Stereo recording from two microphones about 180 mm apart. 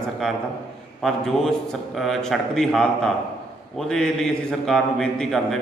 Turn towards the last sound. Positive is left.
turn(degrees=5)  # may be behind; listen again after turning